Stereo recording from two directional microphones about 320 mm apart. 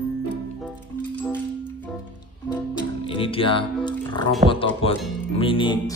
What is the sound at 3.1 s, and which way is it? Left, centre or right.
Music, centre.